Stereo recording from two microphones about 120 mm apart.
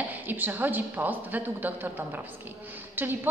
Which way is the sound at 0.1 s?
15° right (ahead or behind).